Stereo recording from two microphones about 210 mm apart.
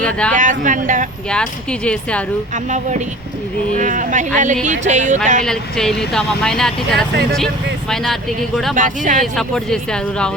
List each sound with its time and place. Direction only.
0.0 s speech: 5° left (ahead or behind)
0.3 s speech: 40° right (ahead or behind)
1.3 s speech: 5° left (ahead or behind)
2.6 s speech: 35° right (ahead or behind)
5.5 s speech: centre (ahead or behind)
8.7 s speech: 40° right (ahead or behind)
9.2 s speech: centre (ahead or behind)